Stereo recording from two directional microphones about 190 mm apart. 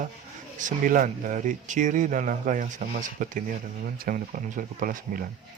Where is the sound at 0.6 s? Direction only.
45° right (ahead or behind).